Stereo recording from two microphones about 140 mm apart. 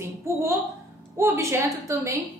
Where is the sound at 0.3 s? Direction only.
20° right (ahead or behind).